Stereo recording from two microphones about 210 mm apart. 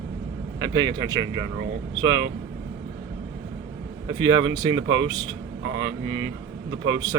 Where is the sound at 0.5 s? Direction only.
20° right (ahead or behind).